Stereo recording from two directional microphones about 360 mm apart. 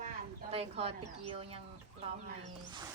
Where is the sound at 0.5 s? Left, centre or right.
Centre.